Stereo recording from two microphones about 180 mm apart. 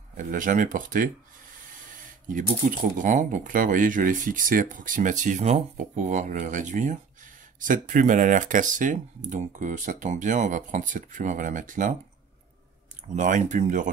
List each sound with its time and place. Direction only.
0.2 s speech: 45° right (ahead or behind)
2.8 s speech: 45° right (ahead or behind)
13.1 s speech: 45° right (ahead or behind)